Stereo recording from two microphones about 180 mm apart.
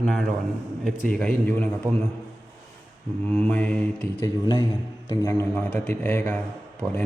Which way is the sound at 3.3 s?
5° left (ahead or behind).